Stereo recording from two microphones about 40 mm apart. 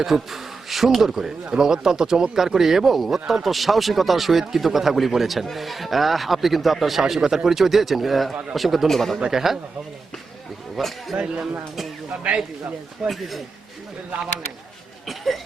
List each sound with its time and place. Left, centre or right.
0.0 s speech: centre
8.9 s speech: centre
9.2 s speech: centre
10.8 s speech: centre
11.1 s speech: right
13.1 s speech: centre
15.0 s speech: centre